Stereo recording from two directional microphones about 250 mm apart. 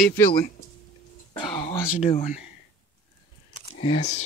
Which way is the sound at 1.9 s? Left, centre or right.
Left.